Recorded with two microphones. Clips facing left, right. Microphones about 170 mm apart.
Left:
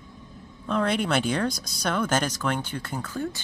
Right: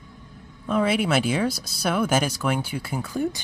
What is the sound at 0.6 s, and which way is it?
Speech, 5° right (ahead or behind).